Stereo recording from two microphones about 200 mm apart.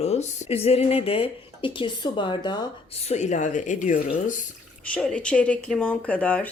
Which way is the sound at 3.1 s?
35° left (ahead or behind).